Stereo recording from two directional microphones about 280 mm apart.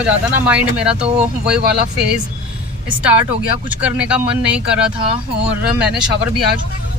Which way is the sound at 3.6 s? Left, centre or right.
Centre.